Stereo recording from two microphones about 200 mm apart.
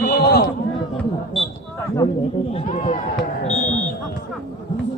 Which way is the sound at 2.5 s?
35° left (ahead or behind).